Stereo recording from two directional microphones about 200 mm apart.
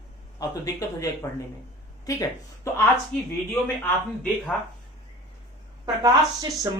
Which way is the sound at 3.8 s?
10° left (ahead or behind).